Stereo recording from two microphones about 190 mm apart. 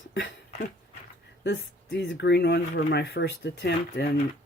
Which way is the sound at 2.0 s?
65° left (ahead or behind).